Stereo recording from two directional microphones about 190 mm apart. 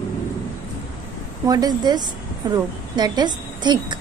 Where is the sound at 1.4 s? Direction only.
20° right (ahead or behind).